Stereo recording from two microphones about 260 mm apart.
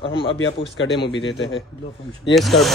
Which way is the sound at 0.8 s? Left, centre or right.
Left.